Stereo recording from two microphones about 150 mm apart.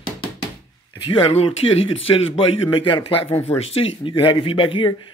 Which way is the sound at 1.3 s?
40° left (ahead or behind).